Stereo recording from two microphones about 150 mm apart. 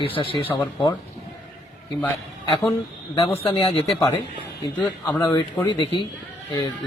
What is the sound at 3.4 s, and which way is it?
Speech, 40° left (ahead or behind).